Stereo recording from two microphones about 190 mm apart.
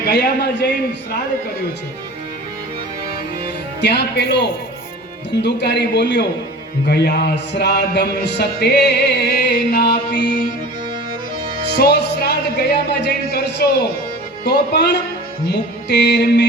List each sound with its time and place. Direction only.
0.1 s music: 60° left (ahead or behind)
3.8 s music: 60° left (ahead or behind)
11.8 s music: 60° left (ahead or behind)
15.9 s music: 60° left (ahead or behind)